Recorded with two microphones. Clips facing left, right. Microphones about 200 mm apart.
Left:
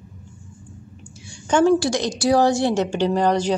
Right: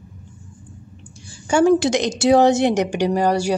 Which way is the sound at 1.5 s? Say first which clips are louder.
Right 2 dB; 15° right (ahead or behind).